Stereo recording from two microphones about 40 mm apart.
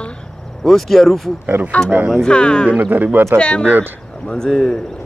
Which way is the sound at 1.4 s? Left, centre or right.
Right.